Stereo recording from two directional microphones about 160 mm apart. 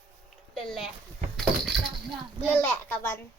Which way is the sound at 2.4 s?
15° left (ahead or behind).